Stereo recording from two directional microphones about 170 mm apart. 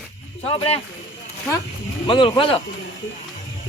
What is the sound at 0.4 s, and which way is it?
Speech, 30° left (ahead or behind).